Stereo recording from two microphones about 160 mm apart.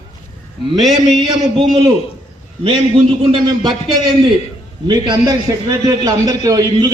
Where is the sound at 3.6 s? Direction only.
25° right (ahead or behind).